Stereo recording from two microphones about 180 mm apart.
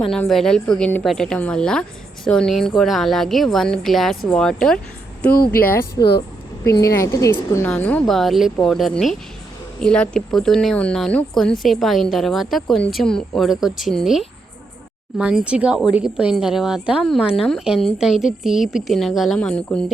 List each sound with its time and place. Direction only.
0.1 s speech: centre (ahead or behind)
5.5 s speech: 55° left (ahead or behind)
6.7 s a woman's voice: 15° left (ahead or behind)